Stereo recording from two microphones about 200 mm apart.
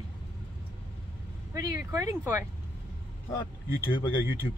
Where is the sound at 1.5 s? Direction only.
15° right (ahead or behind).